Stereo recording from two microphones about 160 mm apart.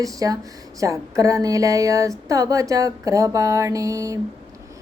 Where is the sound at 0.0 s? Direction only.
20° right (ahead or behind).